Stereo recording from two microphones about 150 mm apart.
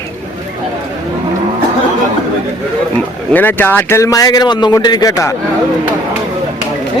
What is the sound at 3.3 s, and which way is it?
A man's voice, 10° left (ahead or behind).